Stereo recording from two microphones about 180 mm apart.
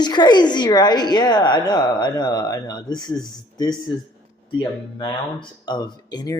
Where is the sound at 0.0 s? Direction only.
25° left (ahead or behind).